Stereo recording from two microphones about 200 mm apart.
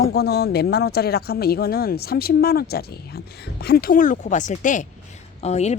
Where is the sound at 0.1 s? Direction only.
55° left (ahead or behind).